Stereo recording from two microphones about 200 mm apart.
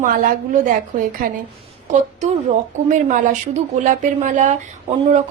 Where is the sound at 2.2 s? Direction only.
40° right (ahead or behind).